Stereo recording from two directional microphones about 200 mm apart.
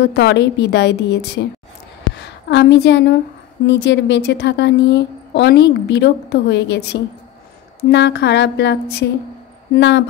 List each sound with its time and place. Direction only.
0.0 s a woman's voice: 55° left (ahead or behind)
9.8 s speech: 60° left (ahead or behind)